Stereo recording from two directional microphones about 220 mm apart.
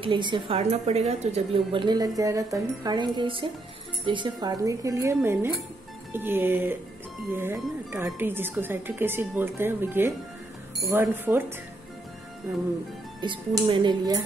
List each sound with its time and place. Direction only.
0.0 s a woman's voice: 20° right (ahead or behind)
13.2 s a woman's voice: 20° right (ahead or behind)